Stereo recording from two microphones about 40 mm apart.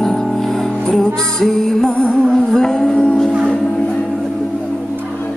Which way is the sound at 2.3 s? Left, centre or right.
Centre.